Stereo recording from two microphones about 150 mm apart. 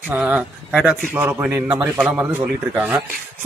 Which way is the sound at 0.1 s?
10° right (ahead or behind).